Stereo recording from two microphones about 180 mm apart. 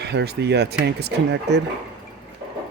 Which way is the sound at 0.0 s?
70° right (ahead or behind).